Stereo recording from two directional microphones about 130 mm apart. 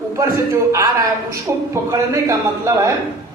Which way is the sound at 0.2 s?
25° right (ahead or behind).